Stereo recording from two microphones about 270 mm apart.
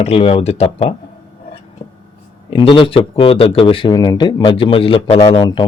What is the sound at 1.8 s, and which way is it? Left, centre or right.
Whispering, left.